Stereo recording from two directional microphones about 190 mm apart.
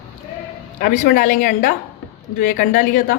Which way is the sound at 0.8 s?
45° left (ahead or behind).